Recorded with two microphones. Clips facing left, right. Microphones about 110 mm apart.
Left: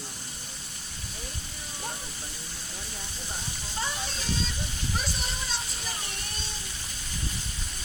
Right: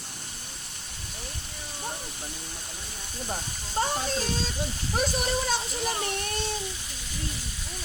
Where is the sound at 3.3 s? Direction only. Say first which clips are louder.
Right 7 dB; 45° right (ahead or behind).